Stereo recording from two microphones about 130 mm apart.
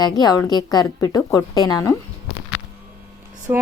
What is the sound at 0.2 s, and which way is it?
A woman's voice, 30° left (ahead or behind).